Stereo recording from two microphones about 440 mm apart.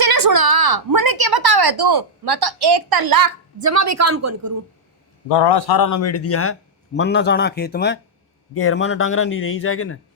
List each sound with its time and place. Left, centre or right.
0.0 s a woman's voice: right
5.3 s speech: left